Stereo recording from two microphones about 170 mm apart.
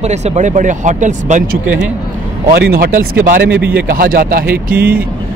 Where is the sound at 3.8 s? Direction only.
60° right (ahead or behind).